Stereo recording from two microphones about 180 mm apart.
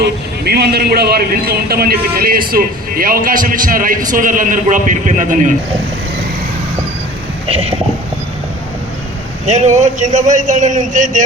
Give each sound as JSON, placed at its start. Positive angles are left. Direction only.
{"t": 0.0, "sound": "a man's voice", "side_deg": -65}
{"t": 7.4, "sound": "speech", "side_deg": -35}
{"t": 9.5, "sound": "a man's voice", "side_deg": -40}